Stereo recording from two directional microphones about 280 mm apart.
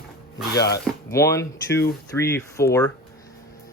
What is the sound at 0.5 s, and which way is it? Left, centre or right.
Speech, left.